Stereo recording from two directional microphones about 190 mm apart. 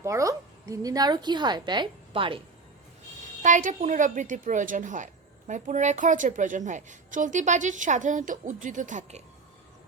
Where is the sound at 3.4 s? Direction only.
40° right (ahead or behind).